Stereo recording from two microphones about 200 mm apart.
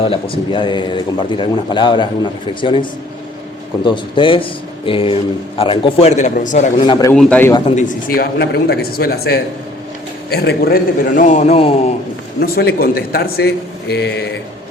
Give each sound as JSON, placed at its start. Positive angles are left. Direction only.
{"t": 0.0, "sound": "speech", "side_deg": 25}
{"t": 3.8, "sound": "a man's voice", "side_deg": 25}
{"t": 6.8, "sound": "speech", "side_deg": 20}
{"t": 7.1, "sound": "a man's voice", "side_deg": 5}
{"t": 7.8, "sound": "a man's voice", "side_deg": 40}
{"t": 12.4, "sound": "speech", "side_deg": 50}